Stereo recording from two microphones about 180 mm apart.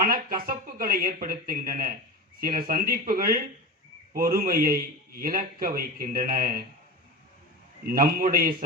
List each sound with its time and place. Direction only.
0.0 s a man's voice: 55° right (ahead or behind)
7.9 s a man's voice: 55° right (ahead or behind)